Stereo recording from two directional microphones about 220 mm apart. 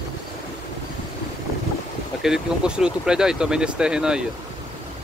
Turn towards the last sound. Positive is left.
turn(degrees=-5)  # may be behind; listen again after turning